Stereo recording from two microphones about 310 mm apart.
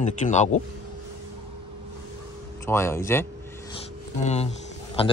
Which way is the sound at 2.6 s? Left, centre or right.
Centre.